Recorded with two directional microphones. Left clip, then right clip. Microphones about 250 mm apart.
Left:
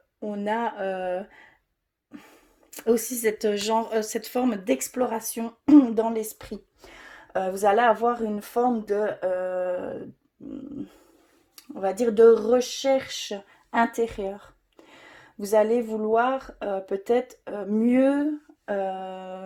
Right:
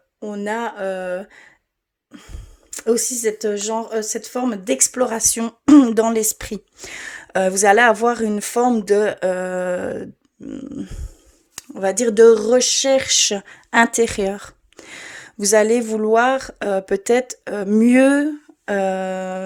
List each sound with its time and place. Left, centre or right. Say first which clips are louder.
0.2 s speech: right 3 dB; centre
2.6 s speech: right 5 dB; centre; by 19.4 s right